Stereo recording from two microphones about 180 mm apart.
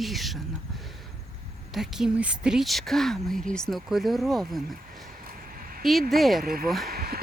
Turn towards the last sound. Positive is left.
turn(degrees=-60)  # may be behind; listen again after turning